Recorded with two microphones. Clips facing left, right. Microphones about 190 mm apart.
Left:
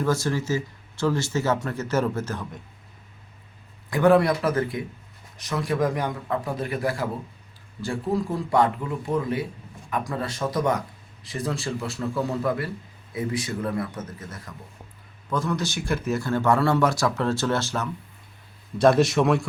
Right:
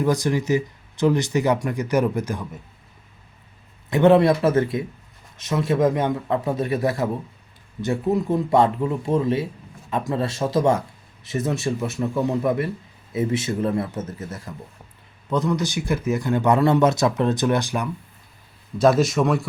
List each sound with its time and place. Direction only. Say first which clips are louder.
0.0 s a man's voice: right 3 dB; 15° right (ahead or behind)
3.8 s a man's voice: right 3 dB; 25° right (ahead or behind)
18.8 s a man's voice: right 1 dB; centre (ahead or behind)